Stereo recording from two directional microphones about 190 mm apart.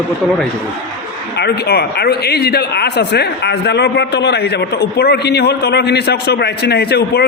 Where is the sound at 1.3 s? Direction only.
60° left (ahead or behind).